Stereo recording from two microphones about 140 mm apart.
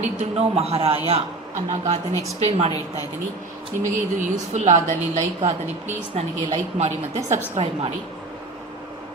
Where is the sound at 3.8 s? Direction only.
65° right (ahead or behind).